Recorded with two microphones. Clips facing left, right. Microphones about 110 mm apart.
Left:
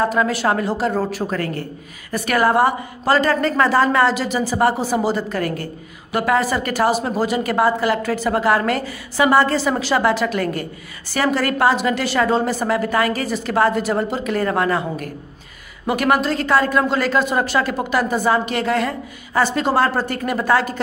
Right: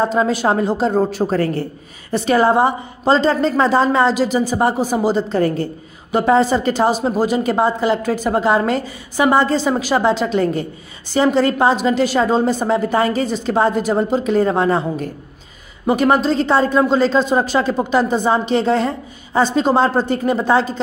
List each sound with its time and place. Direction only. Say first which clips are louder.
0.0 s a woman's voice: right 2 dB; 25° right (ahead or behind)